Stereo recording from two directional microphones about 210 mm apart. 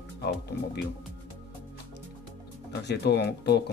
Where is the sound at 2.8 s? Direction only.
55° left (ahead or behind).